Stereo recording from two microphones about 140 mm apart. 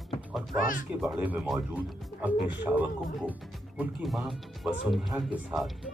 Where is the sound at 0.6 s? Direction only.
75° left (ahead or behind).